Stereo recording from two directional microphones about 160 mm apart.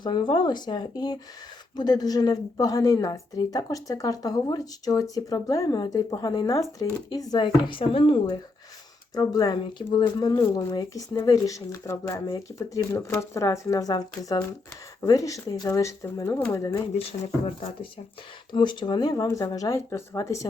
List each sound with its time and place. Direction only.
0.0 s a woman's voice: 30° left (ahead or behind)
9.1 s a woman's voice: 25° left (ahead or behind)
18.5 s a woman's voice: 30° left (ahead or behind)